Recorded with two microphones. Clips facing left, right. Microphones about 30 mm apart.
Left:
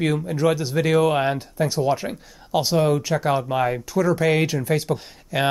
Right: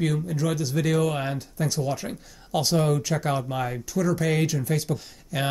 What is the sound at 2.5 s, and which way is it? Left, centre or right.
Speech, centre.